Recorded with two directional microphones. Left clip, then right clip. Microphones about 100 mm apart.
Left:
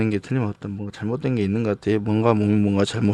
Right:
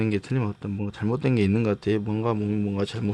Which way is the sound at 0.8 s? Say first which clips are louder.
Even; 20° left (ahead or behind).